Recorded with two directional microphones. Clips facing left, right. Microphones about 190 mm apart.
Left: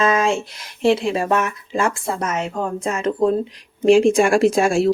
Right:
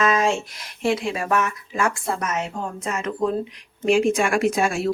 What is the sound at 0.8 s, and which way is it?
Speech, 30° left (ahead or behind).